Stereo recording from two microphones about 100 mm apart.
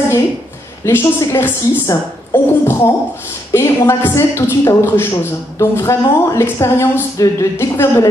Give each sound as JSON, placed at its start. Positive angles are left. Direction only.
{"t": 0.8, "sound": "a man's voice", "side_deg": 30}